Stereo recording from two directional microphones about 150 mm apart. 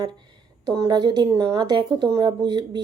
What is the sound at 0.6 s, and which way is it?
Speech, 30° right (ahead or behind).